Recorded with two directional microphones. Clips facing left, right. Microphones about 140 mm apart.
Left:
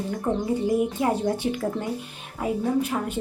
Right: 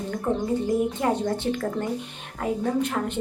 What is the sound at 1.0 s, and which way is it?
A woman's voice, 10° left (ahead or behind).